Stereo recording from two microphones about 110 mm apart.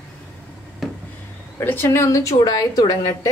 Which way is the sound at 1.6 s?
25° left (ahead or behind).